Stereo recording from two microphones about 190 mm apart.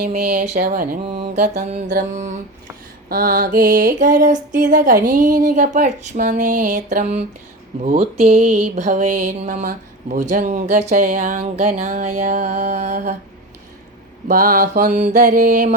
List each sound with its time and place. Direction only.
0.0 s music: 45° right (ahead or behind)
1.1 s mantra: 55° right (ahead or behind)
1.9 s music: 45° right (ahead or behind)
8.1 s a sound: 35° right (ahead or behind)
14.3 s music: 50° right (ahead or behind)